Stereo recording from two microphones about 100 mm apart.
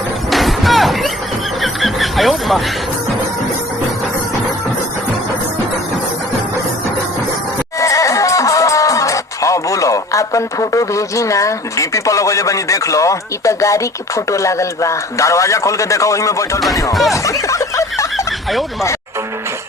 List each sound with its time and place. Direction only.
0.3 s slam: centre (ahead or behind)
1.6 s music: centre (ahead or behind)
7.8 s speech: 35° left (ahead or behind)
16.9 s speech: centre (ahead or behind)
17.2 s a sound: 30° left (ahead or behind)